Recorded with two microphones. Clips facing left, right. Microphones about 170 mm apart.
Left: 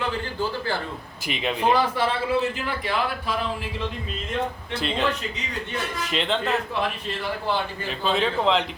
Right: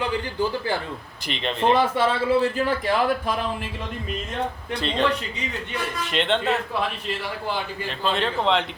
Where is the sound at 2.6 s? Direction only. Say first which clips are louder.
Right 5 dB; 45° right (ahead or behind).